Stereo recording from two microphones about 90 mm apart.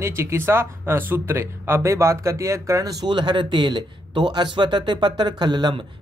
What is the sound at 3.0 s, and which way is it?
Speech, 60° right (ahead or behind).